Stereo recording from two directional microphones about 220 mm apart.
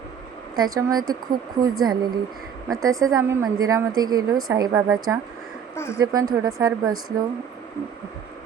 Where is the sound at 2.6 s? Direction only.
15° right (ahead or behind).